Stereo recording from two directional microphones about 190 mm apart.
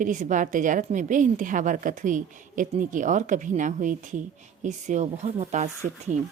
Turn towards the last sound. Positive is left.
turn(degrees=-50)  # may be behind; listen again after turning